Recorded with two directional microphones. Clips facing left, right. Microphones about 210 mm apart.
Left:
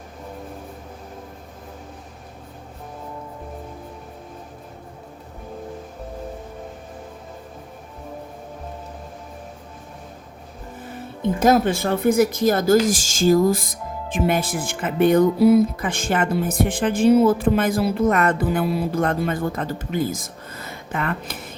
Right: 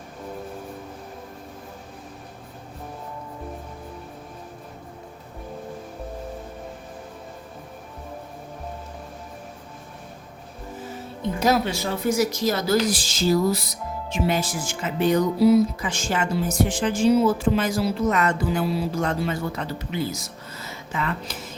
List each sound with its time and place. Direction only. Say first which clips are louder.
11.3 s a woman's voice: left 5 dB; 50° left (ahead or behind)